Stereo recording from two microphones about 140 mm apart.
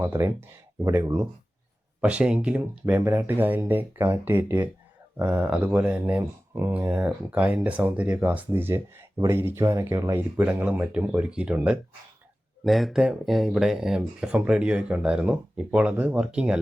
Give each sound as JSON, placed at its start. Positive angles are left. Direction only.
{"t": 0.0, "sound": "speech", "side_deg": -15}
{"t": 9.1, "sound": "speech", "side_deg": -25}